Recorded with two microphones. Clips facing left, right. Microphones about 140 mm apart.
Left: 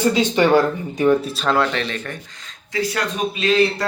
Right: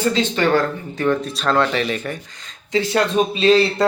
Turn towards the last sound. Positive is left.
turn(degrees=-30)  # may be behind; listen again after turning